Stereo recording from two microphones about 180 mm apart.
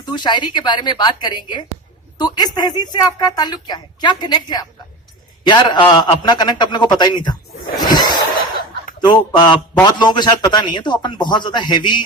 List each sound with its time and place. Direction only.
0.1 s a woman's voice: 25° left (ahead or behind)
7.8 s a sound: 25° left (ahead or behind)
9.0 s a woman's voice: 25° left (ahead or behind)